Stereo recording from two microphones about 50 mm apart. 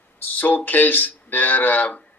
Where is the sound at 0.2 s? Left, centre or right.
Left.